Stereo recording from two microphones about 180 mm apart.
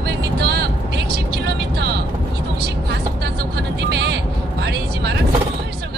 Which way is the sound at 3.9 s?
65° right (ahead or behind).